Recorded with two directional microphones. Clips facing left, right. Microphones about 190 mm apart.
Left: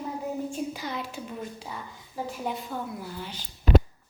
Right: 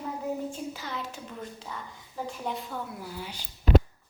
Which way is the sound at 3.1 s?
10° right (ahead or behind).